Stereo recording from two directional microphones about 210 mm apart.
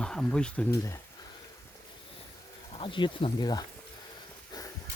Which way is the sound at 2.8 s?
25° left (ahead or behind).